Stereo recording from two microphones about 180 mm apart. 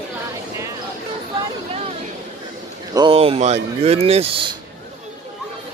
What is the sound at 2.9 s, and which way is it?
Speech, 30° right (ahead or behind).